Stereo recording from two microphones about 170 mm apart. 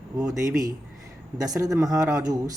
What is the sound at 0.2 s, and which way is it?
A man's voice, 20° right (ahead or behind).